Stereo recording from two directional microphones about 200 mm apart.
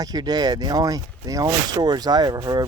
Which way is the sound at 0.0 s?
20° right (ahead or behind).